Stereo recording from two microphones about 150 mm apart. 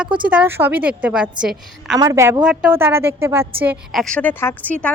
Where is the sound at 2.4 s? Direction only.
5° right (ahead or behind).